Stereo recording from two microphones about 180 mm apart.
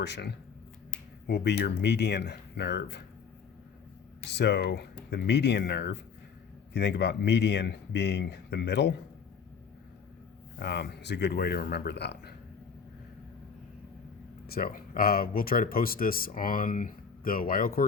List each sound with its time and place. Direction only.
0.0 s speech: 70° left (ahead or behind)
4.3 s speech: 70° left (ahead or behind)
10.6 s speech: 70° left (ahead or behind)
14.5 s speech: 55° left (ahead or behind)